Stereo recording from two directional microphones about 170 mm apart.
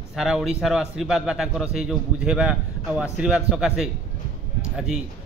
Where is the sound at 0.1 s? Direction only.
5° right (ahead or behind).